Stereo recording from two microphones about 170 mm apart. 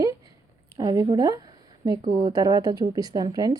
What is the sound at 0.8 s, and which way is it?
Speech, 25° right (ahead or behind).